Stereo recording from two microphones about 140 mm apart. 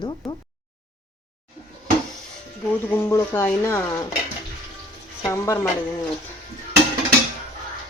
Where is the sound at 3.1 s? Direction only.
20° left (ahead or behind).